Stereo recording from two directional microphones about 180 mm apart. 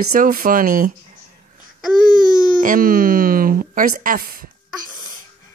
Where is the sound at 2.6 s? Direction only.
50° right (ahead or behind).